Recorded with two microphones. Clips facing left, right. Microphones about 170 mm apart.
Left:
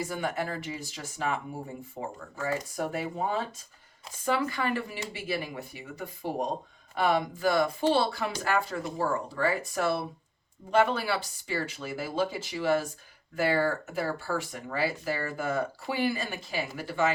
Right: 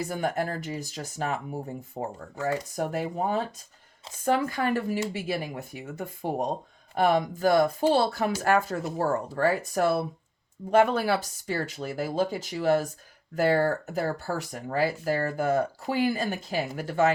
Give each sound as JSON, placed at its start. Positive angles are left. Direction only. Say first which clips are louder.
{"t": 0.1, "sound": "speech", "louder": "right 3 dB", "side_deg": -45}